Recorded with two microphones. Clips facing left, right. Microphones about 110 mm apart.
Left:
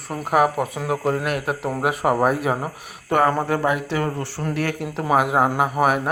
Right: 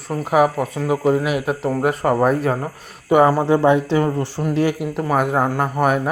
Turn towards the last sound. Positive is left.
turn(degrees=5)  # may be behind; listen again after turning